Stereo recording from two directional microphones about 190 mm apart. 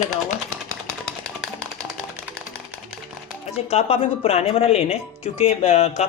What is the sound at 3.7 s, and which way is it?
Speech, 30° left (ahead or behind).